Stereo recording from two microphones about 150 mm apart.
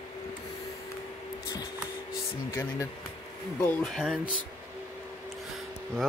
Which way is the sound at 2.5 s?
20° left (ahead or behind).